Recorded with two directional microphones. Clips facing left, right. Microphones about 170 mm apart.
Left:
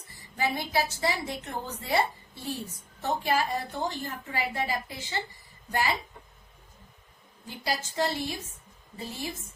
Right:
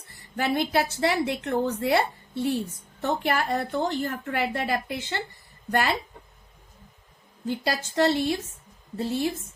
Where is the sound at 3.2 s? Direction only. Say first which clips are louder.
Even; 70° right (ahead or behind).